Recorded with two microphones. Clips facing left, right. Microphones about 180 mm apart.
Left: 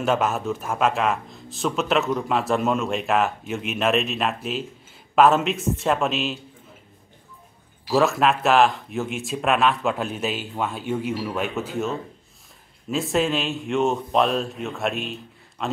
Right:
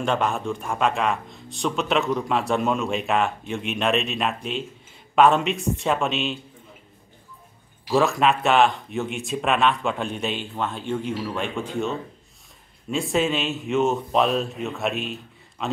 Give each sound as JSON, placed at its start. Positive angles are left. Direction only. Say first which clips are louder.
{"t": 0.0, "sound": "a man's voice", "louder": "left 1 dB", "side_deg": 5}
{"t": 7.9, "sound": "a man's voice", "louder": "even", "side_deg": 0}